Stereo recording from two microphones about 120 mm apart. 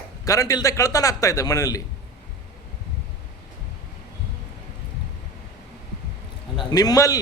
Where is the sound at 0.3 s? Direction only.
30° left (ahead or behind).